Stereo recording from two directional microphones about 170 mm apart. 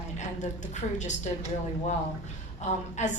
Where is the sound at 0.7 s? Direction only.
45° left (ahead or behind).